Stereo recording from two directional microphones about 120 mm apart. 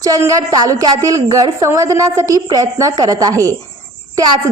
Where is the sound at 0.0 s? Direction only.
30° right (ahead or behind).